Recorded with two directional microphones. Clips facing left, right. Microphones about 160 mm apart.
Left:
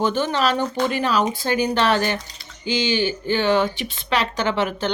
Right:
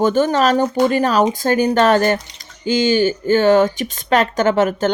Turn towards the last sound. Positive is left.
turn(degrees=-45)  # may be behind; listen again after turning